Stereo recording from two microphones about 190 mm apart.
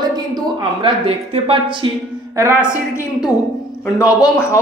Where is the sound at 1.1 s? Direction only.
30° right (ahead or behind).